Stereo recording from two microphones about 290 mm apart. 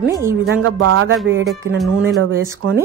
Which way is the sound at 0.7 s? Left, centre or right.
Right.